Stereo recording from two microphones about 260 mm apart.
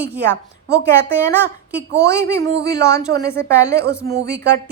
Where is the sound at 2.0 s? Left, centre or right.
Centre.